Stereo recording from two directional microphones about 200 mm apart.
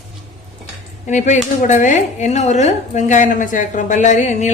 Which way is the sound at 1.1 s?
35° left (ahead or behind).